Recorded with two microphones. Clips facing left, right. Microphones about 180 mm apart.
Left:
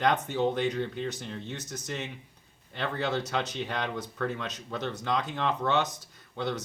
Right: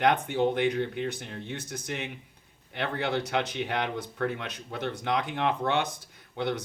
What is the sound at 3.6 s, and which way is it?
Speech, 60° right (ahead or behind).